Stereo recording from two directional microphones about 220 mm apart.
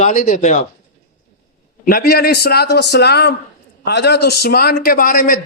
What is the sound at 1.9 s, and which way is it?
A man's voice, 45° left (ahead or behind).